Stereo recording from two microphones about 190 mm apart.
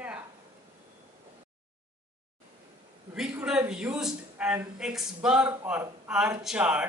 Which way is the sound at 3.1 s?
5° right (ahead or behind).